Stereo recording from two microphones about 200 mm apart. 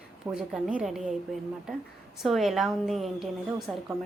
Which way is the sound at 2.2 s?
Centre (ahead or behind).